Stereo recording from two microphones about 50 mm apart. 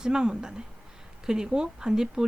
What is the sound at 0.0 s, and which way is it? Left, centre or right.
Speech, centre.